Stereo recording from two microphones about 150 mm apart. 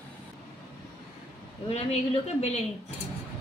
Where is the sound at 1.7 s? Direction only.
45° left (ahead or behind).